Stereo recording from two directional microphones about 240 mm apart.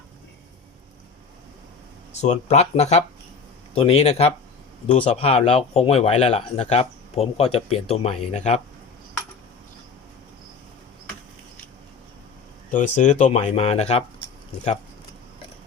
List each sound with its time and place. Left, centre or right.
2.2 s speech: left
12.7 s speech: left